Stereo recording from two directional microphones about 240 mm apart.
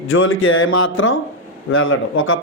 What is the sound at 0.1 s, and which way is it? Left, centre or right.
A man's voice, left.